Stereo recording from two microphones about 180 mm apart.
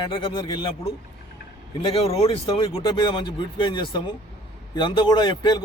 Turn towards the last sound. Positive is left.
turn(degrees=25)  # may be behind; listen again after turning